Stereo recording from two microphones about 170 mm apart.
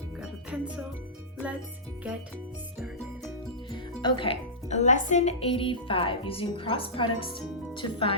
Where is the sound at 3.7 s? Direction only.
30° left (ahead or behind).